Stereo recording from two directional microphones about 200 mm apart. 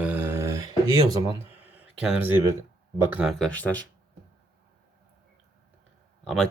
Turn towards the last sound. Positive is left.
turn(degrees=0)  # may be behind; listen again after turning